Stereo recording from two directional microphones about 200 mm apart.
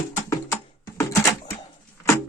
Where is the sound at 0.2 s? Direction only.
15° left (ahead or behind).